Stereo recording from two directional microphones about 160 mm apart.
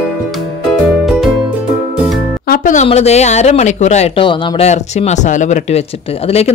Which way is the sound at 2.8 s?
40° left (ahead or behind).